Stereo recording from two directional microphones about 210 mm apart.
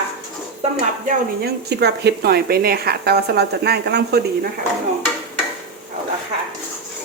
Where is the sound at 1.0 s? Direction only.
50° right (ahead or behind).